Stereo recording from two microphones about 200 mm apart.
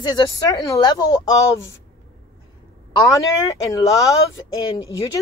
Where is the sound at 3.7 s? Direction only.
15° left (ahead or behind).